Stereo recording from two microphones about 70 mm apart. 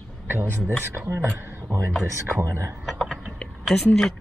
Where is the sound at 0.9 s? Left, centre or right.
Right.